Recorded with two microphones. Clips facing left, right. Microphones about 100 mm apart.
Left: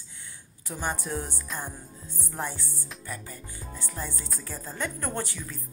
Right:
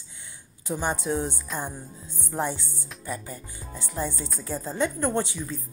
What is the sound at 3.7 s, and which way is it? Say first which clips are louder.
A woman's voice: right 7 dB; 20° right (ahead or behind).